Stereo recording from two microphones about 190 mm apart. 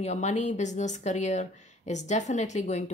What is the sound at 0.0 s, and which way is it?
A woman's voice, 35° left (ahead or behind).